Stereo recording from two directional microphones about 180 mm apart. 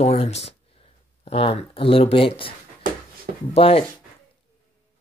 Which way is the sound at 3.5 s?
30° left (ahead or behind).